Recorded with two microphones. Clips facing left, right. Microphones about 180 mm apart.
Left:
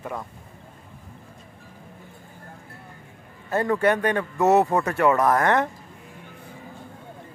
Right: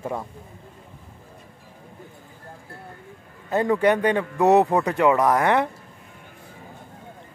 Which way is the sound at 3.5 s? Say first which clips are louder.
Right 2 dB; 15° right (ahead or behind).